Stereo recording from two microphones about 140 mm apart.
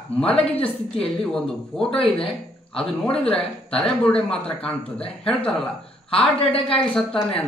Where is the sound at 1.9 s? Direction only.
40° left (ahead or behind).